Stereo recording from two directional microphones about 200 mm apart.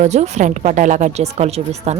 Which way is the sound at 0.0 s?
35° right (ahead or behind).